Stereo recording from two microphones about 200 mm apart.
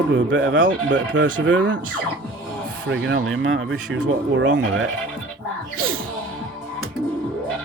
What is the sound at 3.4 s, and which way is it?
Speech, 80° right.